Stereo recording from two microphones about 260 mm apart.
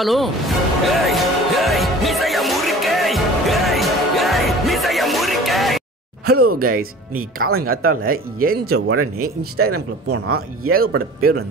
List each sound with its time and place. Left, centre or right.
0.0 s music: centre
6.3 s speech: right
6.6 s speech: right
8.7 s speech: right
10.7 s speech: right